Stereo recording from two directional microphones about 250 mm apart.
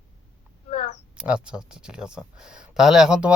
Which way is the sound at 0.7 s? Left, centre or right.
Left.